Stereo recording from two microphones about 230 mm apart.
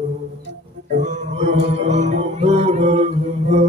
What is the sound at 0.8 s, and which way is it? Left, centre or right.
Music, right.